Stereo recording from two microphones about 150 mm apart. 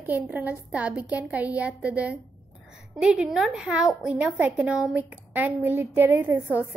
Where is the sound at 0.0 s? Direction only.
10° right (ahead or behind).